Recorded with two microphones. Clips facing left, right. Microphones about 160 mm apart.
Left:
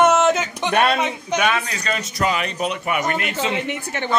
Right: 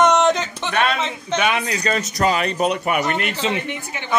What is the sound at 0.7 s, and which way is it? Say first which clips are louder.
Speech: left 3 dB; 15° left (ahead or behind).